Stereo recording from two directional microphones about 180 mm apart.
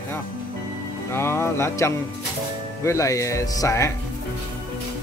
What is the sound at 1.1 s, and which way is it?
Speech, 15° left (ahead or behind).